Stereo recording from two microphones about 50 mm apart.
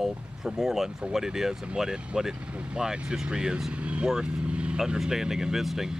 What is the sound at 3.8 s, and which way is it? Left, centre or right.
Speech, right.